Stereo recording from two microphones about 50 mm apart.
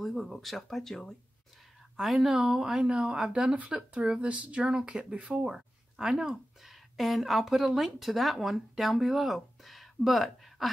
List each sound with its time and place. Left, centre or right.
0.0 s speech: centre
2.0 s speech: centre